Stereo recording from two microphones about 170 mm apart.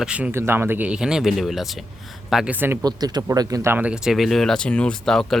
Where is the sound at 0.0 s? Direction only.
5° right (ahead or behind).